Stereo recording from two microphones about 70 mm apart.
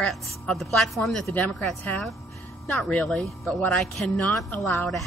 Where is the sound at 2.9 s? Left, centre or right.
Centre.